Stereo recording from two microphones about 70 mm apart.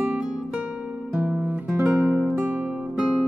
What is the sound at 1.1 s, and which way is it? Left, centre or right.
Guitar, centre.